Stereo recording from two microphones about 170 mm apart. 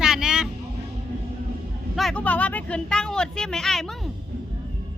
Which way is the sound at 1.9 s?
5° left (ahead or behind).